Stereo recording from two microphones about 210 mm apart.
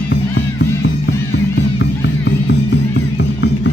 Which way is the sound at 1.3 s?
55° left (ahead or behind).